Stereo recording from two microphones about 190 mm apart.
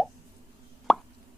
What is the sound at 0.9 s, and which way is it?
Plop, centre (ahead or behind).